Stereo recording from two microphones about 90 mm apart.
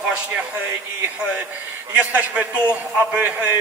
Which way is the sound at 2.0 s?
15° right (ahead or behind).